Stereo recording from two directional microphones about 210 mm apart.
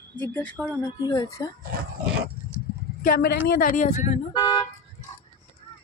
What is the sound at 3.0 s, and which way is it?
A woman's voice, 45° left (ahead or behind).